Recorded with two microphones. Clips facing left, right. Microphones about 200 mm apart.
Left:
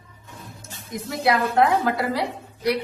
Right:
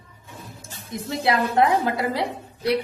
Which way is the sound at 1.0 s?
25° right (ahead or behind).